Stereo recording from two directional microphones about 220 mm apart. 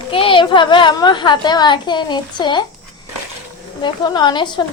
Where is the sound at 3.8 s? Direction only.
20° left (ahead or behind).